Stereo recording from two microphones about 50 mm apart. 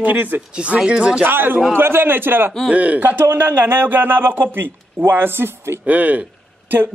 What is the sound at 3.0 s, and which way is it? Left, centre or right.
A man's voice, right.